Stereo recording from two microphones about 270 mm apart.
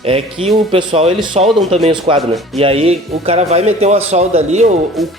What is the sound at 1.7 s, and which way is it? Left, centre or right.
Speech, right.